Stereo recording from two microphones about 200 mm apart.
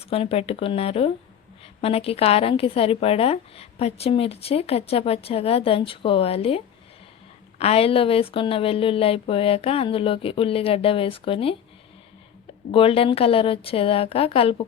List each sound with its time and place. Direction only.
0.1 s a woman's voice: 30° left (ahead or behind)
7.6 s a woman's voice: 30° left (ahead or behind)
12.7 s a woman's voice: 25° left (ahead or behind)